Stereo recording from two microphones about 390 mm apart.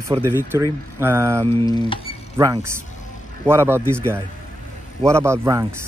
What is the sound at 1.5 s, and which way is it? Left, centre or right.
Speech, centre.